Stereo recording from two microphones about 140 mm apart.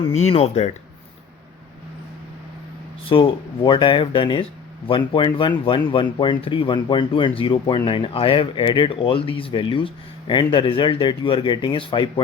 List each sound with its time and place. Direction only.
0.0 s speech: 45° left (ahead or behind)
3.1 s speech: 40° left (ahead or behind)